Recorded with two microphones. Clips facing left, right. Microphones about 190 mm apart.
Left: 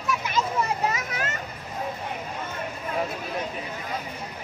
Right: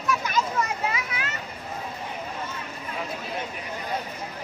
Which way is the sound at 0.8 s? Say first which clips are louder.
Left 2 dB; 45° left (ahead or behind).